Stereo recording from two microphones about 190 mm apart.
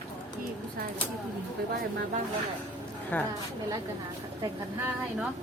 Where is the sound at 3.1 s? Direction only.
10° left (ahead or behind).